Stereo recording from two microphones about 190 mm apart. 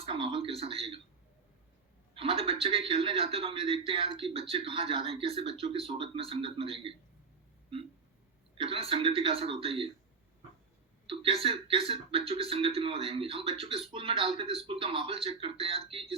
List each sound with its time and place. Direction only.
0.0 s speech: 25° right (ahead or behind)
2.1 s a man's voice: 30° right (ahead or behind)
8.5 s a man's voice: 30° right (ahead or behind)
11.0 s a man's voice: 30° right (ahead or behind)